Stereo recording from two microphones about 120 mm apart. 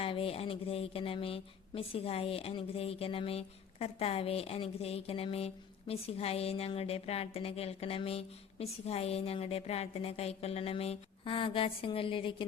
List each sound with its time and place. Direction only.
0.0 s a woman's voice: 50° left (ahead or behind)